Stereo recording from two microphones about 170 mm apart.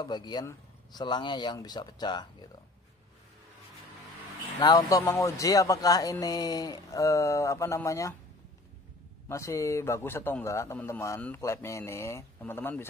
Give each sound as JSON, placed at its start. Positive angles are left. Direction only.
{"t": 0.0, "sound": "speech", "side_deg": 25}
{"t": 4.6, "sound": "speech", "side_deg": 25}
{"t": 9.3, "sound": "a man's voice", "side_deg": 15}